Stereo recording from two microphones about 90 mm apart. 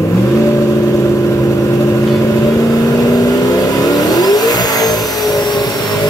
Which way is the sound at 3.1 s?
45° left (ahead or behind).